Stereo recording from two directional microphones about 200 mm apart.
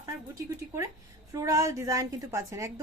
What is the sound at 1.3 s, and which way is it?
A woman's voice, 15° right (ahead or behind).